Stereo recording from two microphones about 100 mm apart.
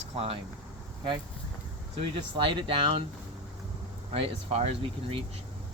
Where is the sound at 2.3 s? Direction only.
60° right (ahead or behind).